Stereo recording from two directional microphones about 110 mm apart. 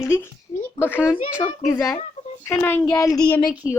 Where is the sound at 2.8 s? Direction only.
30° left (ahead or behind).